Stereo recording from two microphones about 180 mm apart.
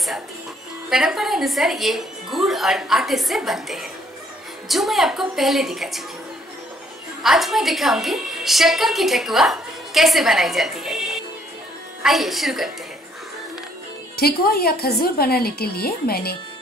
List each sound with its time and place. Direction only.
0.8 s a woman's voice: centre (ahead or behind)
7.2 s a woman's voice: centre (ahead or behind)
14.1 s a woman's voice: 60° left (ahead or behind)